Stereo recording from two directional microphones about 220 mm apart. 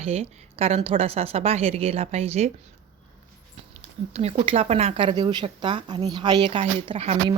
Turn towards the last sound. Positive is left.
turn(degrees=-25)  # may be behind; listen again after turning